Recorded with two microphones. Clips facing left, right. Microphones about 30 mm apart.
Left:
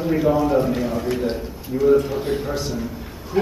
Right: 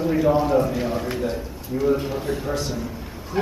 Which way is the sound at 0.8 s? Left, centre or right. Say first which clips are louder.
Left 2 dB; centre.